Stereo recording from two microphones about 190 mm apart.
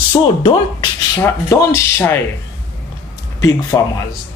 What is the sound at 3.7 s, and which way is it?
Speech, 15° left (ahead or behind).